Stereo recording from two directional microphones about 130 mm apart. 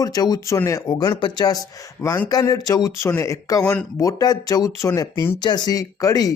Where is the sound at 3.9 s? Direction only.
25° left (ahead or behind).